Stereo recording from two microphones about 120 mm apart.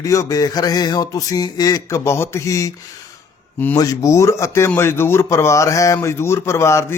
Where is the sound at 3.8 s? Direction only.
30° left (ahead or behind).